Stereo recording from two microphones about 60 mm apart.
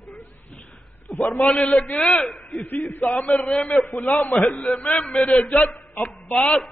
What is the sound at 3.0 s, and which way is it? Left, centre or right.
Speech, centre.